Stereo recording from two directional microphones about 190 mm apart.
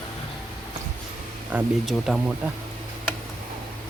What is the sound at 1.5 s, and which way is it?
Speech, 5° right (ahead or behind).